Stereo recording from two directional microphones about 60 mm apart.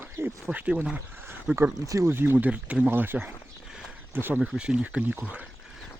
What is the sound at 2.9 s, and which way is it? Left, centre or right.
Speech, right.